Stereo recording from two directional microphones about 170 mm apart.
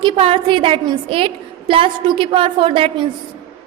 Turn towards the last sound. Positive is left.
turn(degrees=-30)  # may be behind; listen again after turning